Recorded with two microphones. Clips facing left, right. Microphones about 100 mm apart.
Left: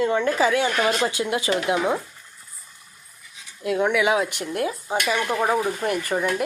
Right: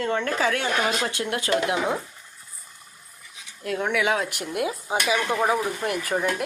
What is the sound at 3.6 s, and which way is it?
Speech, 5° left (ahead or behind).